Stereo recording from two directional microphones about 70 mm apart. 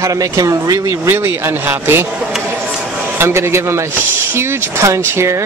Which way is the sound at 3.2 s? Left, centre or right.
Right.